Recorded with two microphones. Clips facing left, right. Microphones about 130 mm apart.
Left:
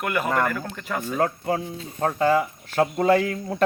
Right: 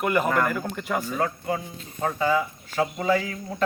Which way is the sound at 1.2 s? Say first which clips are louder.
Left 3 dB; 50° left (ahead or behind).